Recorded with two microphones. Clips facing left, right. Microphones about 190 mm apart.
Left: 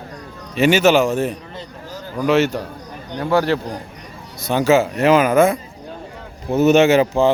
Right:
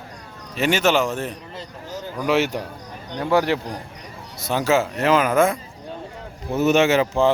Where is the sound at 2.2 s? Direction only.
15° right (ahead or behind).